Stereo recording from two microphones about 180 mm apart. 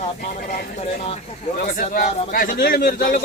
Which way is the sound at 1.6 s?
50° left (ahead or behind).